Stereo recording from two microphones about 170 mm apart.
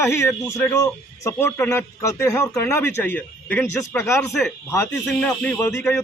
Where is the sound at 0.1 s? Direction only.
15° left (ahead or behind).